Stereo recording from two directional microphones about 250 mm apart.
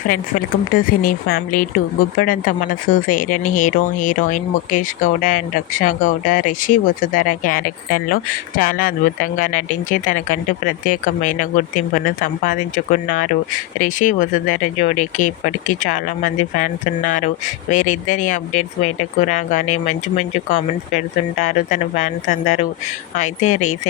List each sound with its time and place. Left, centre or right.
0.0 s speech: left
21.3 s speech: left